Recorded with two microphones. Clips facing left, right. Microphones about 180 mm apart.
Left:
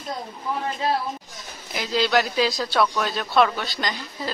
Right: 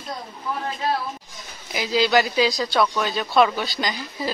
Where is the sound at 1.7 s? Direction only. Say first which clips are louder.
Right 2 dB; 5° right (ahead or behind).